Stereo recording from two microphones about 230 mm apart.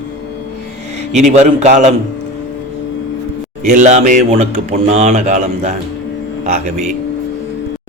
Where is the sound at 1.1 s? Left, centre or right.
Right.